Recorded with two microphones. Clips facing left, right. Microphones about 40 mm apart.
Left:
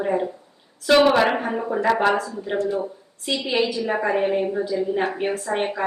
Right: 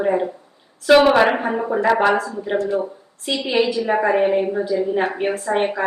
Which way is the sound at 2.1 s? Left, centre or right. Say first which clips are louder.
Right 3 dB; right.